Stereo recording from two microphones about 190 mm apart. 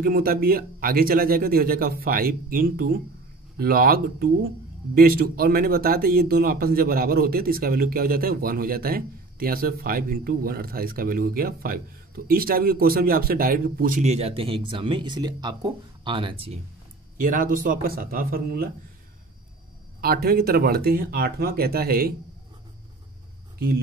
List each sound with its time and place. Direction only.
0.0 s speech: 50° right (ahead or behind); by 16.5 s 30° right (ahead or behind)
17.2 s speech: 45° right (ahead or behind)
20.0 s speech: 50° right (ahead or behind)